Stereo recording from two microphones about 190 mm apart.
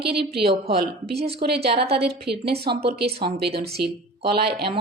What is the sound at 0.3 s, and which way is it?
Speech, 55° right (ahead or behind).